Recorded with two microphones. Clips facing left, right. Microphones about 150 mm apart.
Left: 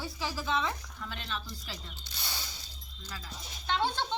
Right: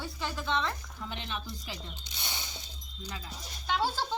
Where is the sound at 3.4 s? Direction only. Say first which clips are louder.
Even; centre (ahead or behind).